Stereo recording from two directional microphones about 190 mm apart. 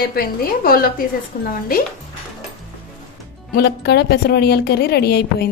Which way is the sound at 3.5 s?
60° left (ahead or behind).